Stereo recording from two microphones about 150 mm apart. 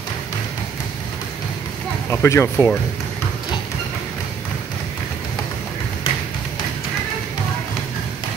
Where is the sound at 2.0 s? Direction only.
20° left (ahead or behind).